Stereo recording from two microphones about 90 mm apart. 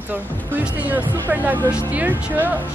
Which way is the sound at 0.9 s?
20° right (ahead or behind).